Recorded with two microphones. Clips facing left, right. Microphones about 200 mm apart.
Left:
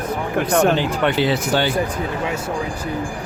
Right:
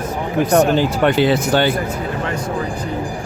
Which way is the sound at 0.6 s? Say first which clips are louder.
Right 2 dB; 45° right (ahead or behind).